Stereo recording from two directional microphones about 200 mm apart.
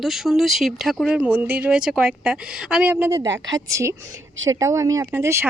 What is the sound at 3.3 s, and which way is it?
Speech, 70° right (ahead or behind).